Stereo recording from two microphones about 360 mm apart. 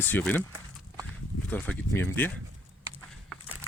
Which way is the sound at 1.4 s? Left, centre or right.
Centre.